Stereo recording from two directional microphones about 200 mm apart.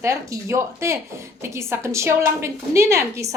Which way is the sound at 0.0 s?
15° right (ahead or behind).